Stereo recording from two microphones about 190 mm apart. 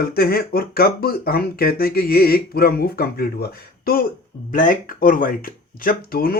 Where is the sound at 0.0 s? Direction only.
55° left (ahead or behind).